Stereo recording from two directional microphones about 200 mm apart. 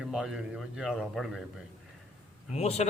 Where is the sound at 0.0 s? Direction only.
Centre (ahead or behind).